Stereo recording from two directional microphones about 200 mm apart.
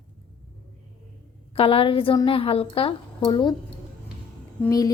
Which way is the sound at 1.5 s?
25° left (ahead or behind).